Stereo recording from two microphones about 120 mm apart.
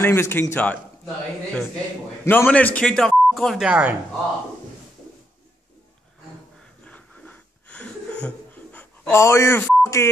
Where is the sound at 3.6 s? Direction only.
10° right (ahead or behind).